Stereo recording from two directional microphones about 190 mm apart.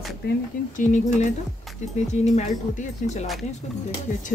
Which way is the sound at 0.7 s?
40° left (ahead or behind).